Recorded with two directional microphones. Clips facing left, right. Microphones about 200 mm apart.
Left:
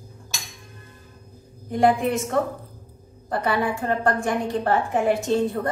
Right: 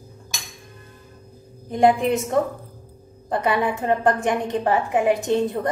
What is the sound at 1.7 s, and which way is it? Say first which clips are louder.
A woman's voice: right 2 dB; 20° right (ahead or behind).